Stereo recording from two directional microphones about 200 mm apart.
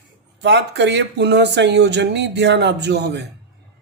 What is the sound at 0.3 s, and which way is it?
Speech, 60° right (ahead or behind).